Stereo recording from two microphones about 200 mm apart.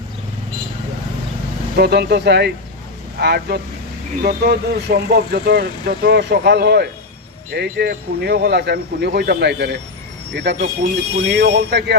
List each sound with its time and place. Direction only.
1.7 s speech: 55° right (ahead or behind)